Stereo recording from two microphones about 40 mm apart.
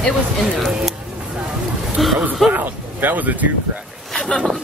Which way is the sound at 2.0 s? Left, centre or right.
Centre.